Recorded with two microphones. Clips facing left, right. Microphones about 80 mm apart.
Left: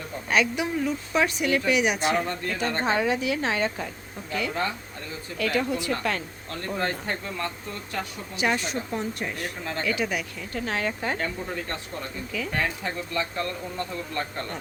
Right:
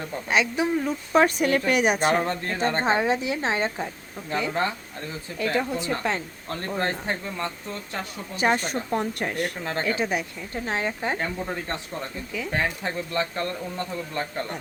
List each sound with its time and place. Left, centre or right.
0.3 s a woman's voice: right
8.4 s speech: right
9.6 s speech: right
12.5 s speech: right